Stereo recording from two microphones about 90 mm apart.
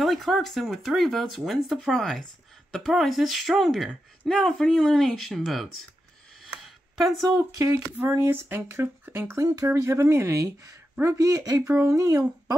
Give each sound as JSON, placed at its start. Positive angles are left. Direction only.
{"t": 0.0, "sound": "speech", "side_deg": 0}
{"t": 6.4, "sound": "a sound", "side_deg": -5}
{"t": 7.2, "sound": "speech", "side_deg": -40}
{"t": 8.0, "sound": "speech", "side_deg": -20}